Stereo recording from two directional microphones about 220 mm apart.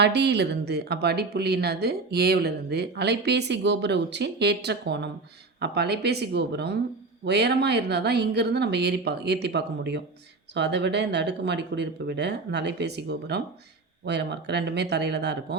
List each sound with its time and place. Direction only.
0.0 s speech: 50° right (ahead or behind)